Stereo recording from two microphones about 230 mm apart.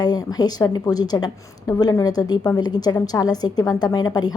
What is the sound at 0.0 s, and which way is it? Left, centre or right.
A woman's voice, centre.